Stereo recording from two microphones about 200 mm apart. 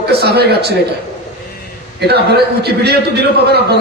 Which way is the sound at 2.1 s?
55° right (ahead or behind).